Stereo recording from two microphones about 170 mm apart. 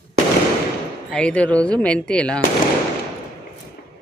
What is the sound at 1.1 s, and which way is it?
Speech, 5° left (ahead or behind).